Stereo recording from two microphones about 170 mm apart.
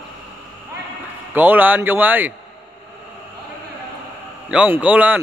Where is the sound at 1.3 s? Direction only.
10° right (ahead or behind).